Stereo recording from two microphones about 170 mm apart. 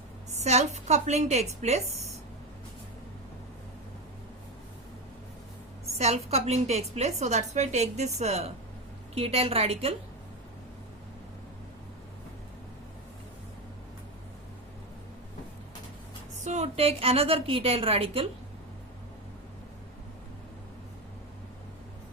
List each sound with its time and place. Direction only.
0.3 s a woman's voice: 40° right (ahead or behind)
6.0 s a woman's voice: 40° right (ahead or behind)
16.4 s a woman's voice: 40° right (ahead or behind)